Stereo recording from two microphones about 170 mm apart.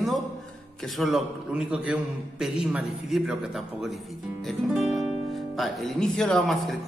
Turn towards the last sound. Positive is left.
turn(degrees=0)  # may be behind; listen again after turning